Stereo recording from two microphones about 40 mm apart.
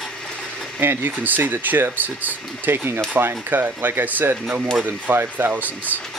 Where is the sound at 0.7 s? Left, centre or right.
Right.